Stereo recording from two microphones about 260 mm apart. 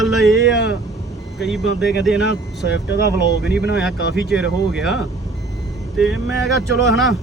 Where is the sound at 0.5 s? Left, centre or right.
Left.